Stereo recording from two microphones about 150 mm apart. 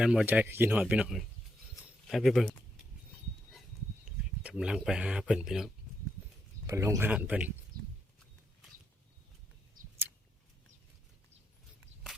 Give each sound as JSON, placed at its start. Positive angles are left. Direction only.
{"t": 0.0, "sound": "speech", "side_deg": -5}
{"t": 1.8, "sound": "a sound", "side_deg": 0}
{"t": 4.4, "sound": "speech", "side_deg": -5}
{"t": 6.7, "sound": "speech", "side_deg": -20}
{"t": 7.1, "sound": "speech", "side_deg": -10}
{"t": 7.7, "sound": "a sound", "side_deg": -75}